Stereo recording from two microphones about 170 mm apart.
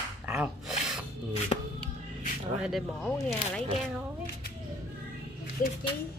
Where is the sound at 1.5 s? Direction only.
35° left (ahead or behind).